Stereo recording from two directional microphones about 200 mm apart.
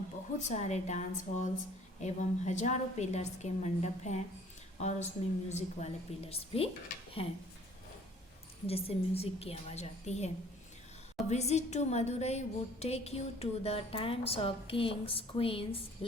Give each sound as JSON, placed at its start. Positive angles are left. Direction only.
{"t": 0.3, "sound": "a woman's voice", "side_deg": 35}
{"t": 8.6, "sound": "a woman's voice", "side_deg": 30}